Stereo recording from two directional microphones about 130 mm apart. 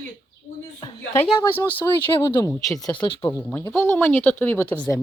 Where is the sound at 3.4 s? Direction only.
10° left (ahead or behind).